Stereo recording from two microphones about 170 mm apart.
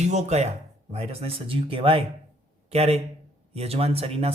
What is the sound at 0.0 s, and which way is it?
A man's voice, 40° right (ahead or behind).